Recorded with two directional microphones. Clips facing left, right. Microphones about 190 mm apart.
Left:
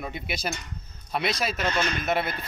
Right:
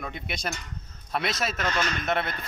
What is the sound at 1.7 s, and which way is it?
Speech, 25° left (ahead or behind).